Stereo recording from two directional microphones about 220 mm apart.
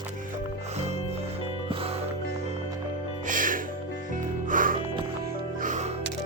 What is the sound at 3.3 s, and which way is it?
Music, 40° right (ahead or behind).